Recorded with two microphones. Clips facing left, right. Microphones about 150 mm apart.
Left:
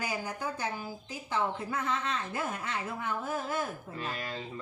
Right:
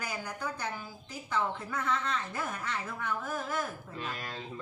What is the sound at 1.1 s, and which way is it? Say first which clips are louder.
A woman's voice: even; 20° left (ahead or behind).